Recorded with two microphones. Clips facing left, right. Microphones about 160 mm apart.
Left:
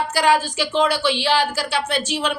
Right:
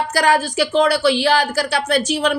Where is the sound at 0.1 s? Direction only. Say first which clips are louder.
Right 1 dB; 40° right (ahead or behind).